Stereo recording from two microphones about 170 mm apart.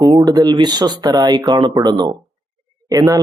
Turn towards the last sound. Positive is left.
turn(degrees=-20)  # may be behind; listen again after turning